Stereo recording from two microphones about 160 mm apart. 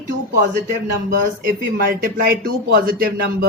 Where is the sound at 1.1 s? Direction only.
75° right (ahead or behind).